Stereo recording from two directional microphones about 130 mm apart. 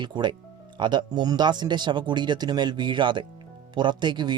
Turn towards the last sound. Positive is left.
turn(degrees=-35)  # may be behind; listen again after turning